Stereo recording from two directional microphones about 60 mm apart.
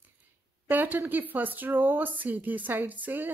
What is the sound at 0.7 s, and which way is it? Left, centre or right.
Speech, right.